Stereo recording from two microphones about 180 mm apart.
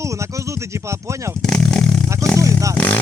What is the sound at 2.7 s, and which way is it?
Vehicle, 10° left (ahead or behind).